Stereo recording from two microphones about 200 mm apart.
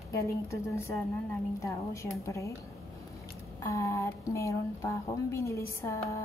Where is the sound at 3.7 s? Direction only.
15° left (ahead or behind).